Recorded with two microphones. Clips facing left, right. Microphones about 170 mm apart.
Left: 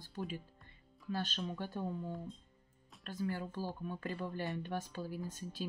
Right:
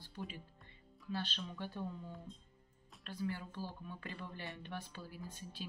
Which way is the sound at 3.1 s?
45° left (ahead or behind).